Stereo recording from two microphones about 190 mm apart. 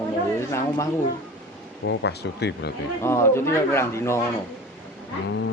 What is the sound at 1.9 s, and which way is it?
Speech, 65° left (ahead or behind).